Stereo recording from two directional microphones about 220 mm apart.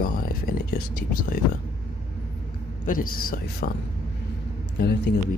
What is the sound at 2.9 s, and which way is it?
Speech, 40° left (ahead or behind).